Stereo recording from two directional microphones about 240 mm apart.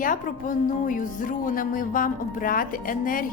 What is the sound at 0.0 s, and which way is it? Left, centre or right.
A woman's voice, left.